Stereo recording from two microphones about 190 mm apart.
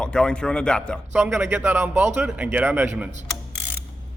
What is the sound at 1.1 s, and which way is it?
Speech, 10° right (ahead or behind).